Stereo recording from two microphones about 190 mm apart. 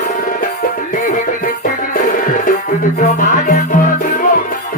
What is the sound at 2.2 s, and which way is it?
Music, 45° left (ahead or behind).